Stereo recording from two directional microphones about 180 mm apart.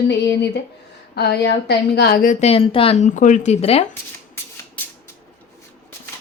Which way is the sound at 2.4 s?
30° left (ahead or behind).